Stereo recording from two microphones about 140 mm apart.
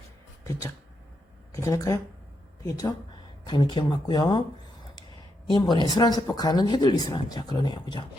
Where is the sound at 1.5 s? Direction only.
20° left (ahead or behind).